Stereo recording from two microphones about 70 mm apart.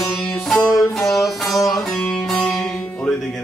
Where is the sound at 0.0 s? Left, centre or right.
Centre.